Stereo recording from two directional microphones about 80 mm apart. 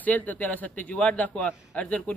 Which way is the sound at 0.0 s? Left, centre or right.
Left.